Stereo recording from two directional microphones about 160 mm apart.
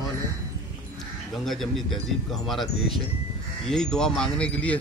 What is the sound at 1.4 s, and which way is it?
A man's voice, centre (ahead or behind).